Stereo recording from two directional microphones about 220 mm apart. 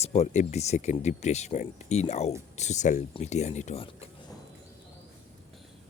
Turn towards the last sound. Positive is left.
turn(degrees=25)  # may be behind; listen again after turning